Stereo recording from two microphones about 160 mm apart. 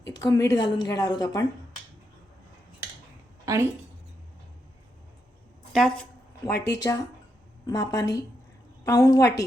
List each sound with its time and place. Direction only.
0.0 s a woman's voice: 25° left (ahead or behind)
3.4 s speech: 20° right (ahead or behind)
5.7 s a woman's voice: centre (ahead or behind)
6.7 s a woman's voice: 20° left (ahead or behind)